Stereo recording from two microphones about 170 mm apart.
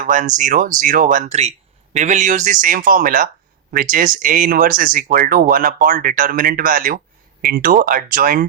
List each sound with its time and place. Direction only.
0.0 s speech: 50° right (ahead or behind)